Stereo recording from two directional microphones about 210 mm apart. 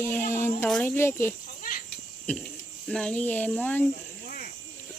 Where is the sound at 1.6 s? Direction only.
40° left (ahead or behind).